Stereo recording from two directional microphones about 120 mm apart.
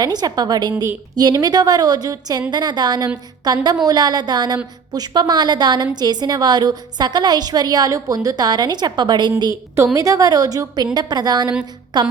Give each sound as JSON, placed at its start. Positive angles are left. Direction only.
{"t": 0.0, "sound": "a woman's voice", "side_deg": -35}
{"t": 9.4, "sound": "a woman's voice", "side_deg": -25}